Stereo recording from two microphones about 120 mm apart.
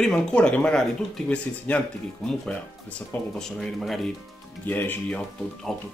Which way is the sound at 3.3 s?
5° left (ahead or behind).